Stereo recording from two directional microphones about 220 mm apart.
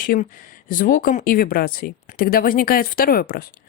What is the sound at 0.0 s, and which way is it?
Speech, 40° left (ahead or behind).